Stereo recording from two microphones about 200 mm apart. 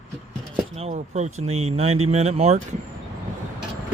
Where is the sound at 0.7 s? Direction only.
30° right (ahead or behind).